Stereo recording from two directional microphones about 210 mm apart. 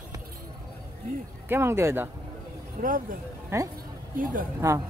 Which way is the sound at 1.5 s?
10° right (ahead or behind).